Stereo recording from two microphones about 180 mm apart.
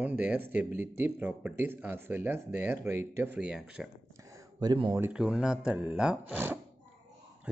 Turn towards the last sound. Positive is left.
turn(degrees=-10)  # may be behind; listen again after turning